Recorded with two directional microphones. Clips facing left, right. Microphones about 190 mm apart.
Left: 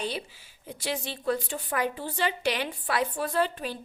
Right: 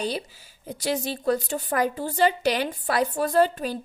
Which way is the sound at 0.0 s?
40° right (ahead or behind).